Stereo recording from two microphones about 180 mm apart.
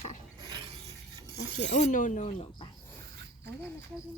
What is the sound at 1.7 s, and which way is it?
Speech, 45° left (ahead or behind).